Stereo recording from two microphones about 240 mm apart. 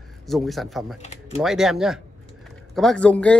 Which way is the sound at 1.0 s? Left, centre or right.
Left.